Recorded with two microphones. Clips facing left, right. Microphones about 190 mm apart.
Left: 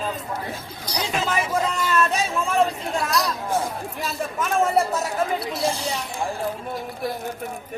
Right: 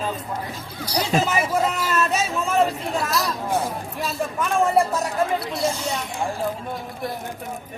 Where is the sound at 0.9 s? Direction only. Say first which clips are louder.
Right 4 dB; 10° right (ahead or behind).